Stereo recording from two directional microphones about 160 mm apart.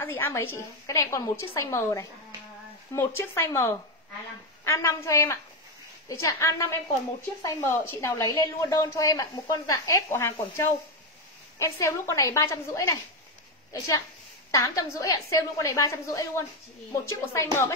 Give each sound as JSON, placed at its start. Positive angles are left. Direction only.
{"t": 0.0, "sound": "a woman's voice", "side_deg": 15}